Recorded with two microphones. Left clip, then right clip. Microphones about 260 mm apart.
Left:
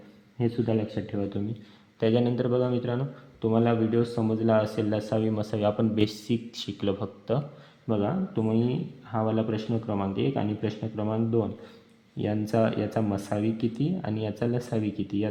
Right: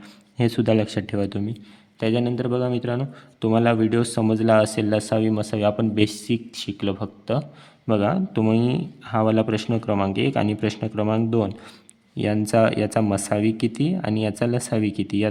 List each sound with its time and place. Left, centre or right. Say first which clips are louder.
0.3 s speech: right 7 dB; right
2.0 s speech: right 2 dB; right